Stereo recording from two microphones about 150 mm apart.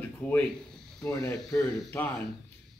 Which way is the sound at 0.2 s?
10° left (ahead or behind).